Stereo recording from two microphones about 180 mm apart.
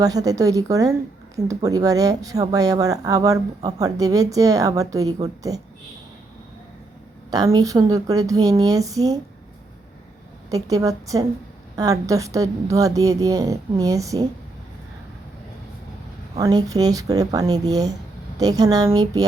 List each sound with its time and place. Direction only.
0.0 s speech: 20° right (ahead or behind)
7.3 s speech: 20° right (ahead or behind)
10.5 s a woman's voice: 20° right (ahead or behind)
16.4 s speech: 20° right (ahead or behind)